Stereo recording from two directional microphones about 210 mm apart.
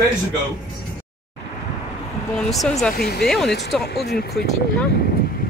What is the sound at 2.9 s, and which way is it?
Speech, 45° left (ahead or behind).